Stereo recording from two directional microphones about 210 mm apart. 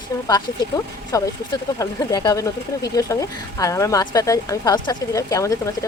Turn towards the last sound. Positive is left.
turn(degrees=15)  # may be behind; listen again after turning